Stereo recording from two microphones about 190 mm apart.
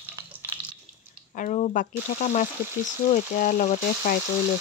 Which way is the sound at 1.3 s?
40° left (ahead or behind).